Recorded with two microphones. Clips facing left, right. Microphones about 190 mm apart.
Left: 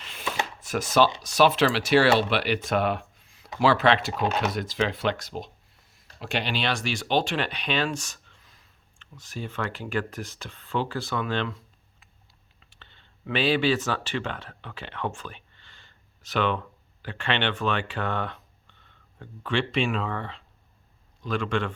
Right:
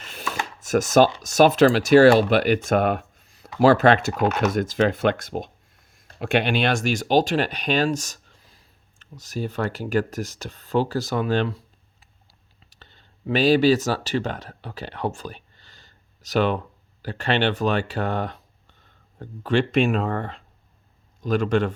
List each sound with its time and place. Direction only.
0.0 s chopping: 45° right (ahead or behind)
0.6 s a man's voice: 45° right (ahead or behind)